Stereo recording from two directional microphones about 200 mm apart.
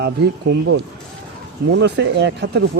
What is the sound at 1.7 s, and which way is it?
Speech, 60° right (ahead or behind).